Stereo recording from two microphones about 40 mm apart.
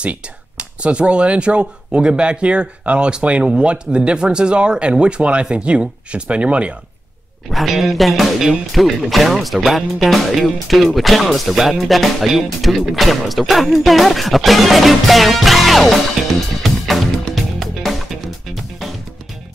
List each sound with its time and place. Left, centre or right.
0.0 s speech: right
7.5 s speech: centre
16.6 s music: centre